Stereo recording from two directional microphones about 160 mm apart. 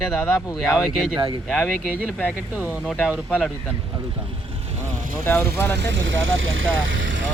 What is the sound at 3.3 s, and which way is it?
Speech, 10° left (ahead or behind).